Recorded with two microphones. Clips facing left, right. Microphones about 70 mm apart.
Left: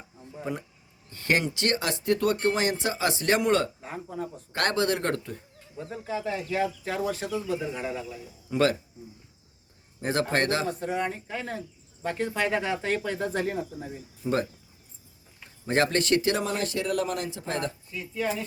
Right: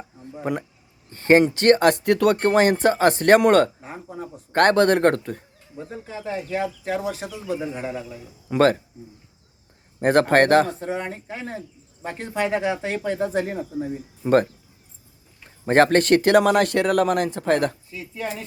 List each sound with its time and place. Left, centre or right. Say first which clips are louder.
0.5 s speech: right 7 dB; right
1.1 s speech: right 11 dB; right
1.5 s speech: right 12 dB; right
6.2 s speech: right 3 dB; centre
8.4 s speech: right 6 dB; right
10.0 s speech: right 10 dB; right
10.8 s speech: right 1 dB; right
14.2 s speech: right 10 dB; right
15.6 s speech: right 8 dB; right
16.4 s speech: right 11 dB; right